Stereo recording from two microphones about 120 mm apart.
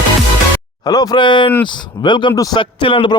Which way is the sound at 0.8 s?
35° left (ahead or behind).